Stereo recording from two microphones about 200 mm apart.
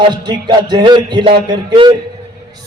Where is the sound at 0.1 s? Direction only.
20° right (ahead or behind).